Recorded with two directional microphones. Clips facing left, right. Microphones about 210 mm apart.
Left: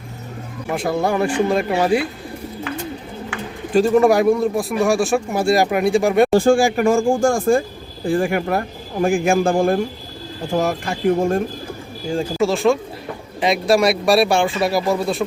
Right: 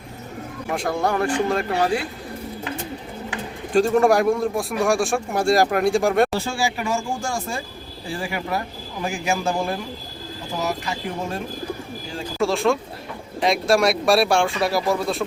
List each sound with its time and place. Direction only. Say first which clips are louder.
0.7 s speech: left 3 dB; 5° left (ahead or behind)
3.8 s a man's voice: left 3 dB; centre (ahead or behind)
6.3 s speech: left 11 dB; 50° left (ahead or behind)
12.4 s a man's voice: left 2 dB; centre (ahead or behind)